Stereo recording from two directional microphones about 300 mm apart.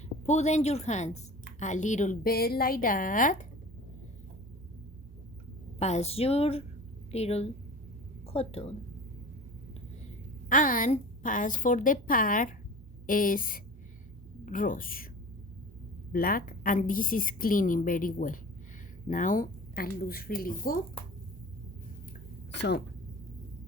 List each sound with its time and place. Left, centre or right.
0.3 s a woman's voice: left
5.8 s a woman's voice: left
10.5 s a woman's voice: left
16.1 s a woman's voice: left
22.5 s a woman's voice: left